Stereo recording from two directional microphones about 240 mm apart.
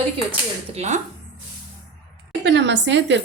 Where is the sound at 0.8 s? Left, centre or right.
Right.